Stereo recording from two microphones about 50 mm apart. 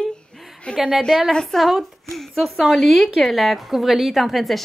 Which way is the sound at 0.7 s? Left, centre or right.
Centre.